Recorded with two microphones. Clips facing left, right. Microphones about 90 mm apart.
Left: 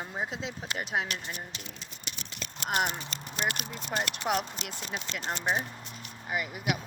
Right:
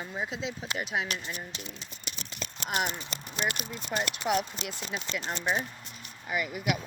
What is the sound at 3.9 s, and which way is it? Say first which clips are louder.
Speech: right 1 dB; 35° left (ahead or behind).